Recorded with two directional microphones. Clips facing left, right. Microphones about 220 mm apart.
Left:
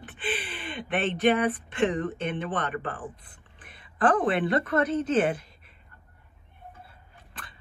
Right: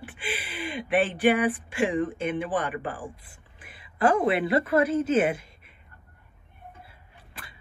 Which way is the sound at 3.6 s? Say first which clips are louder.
Right 1 dB; 5° right (ahead or behind).